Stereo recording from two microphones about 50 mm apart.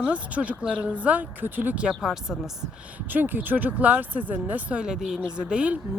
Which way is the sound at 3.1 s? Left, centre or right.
Right.